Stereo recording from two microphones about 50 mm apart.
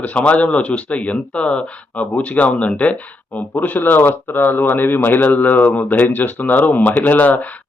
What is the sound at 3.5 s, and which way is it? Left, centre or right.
A man's voice, left.